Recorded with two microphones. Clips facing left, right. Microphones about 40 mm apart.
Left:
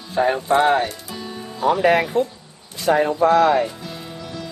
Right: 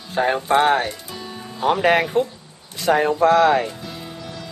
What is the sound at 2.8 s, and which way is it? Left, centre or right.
Speech, right.